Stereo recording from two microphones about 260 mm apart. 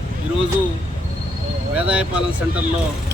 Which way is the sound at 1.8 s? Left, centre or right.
Centre.